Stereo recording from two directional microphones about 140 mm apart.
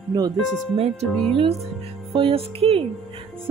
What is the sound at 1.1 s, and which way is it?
Music, 5° left (ahead or behind).